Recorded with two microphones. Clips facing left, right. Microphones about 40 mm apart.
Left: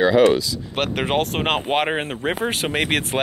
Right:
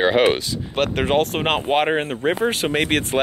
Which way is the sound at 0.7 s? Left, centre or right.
Centre.